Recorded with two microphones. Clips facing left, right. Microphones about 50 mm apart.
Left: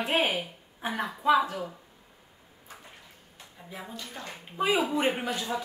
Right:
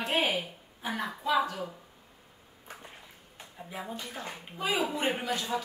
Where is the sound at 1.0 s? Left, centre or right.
Centre.